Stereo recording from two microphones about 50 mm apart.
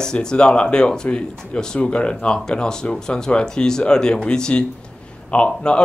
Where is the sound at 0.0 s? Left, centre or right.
Centre.